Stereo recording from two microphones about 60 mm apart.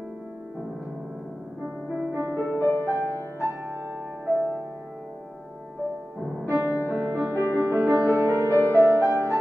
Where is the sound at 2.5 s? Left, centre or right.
Left.